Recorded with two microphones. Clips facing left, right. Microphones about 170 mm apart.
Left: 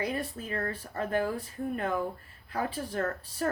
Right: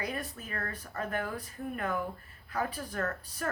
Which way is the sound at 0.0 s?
30° left (ahead or behind).